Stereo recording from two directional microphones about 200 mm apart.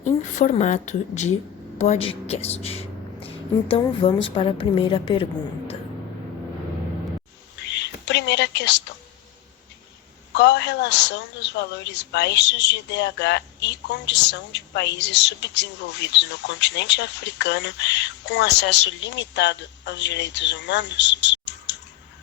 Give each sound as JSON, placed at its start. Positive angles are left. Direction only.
{"t": 0.0, "sound": "a woman's voice", "side_deg": 40}
{"t": 7.5, "sound": "whispering", "side_deg": 60}
{"t": 10.3, "sound": "a woman's voice", "side_deg": 60}